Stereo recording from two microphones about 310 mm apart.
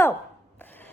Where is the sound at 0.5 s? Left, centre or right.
Centre.